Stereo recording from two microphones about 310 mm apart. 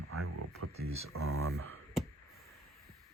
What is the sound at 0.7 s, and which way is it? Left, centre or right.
Speech, centre.